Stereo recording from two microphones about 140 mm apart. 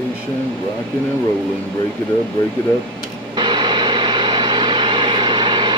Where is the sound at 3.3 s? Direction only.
30° right (ahead or behind).